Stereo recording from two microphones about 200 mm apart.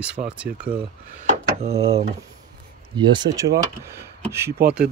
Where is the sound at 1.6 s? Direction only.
30° right (ahead or behind).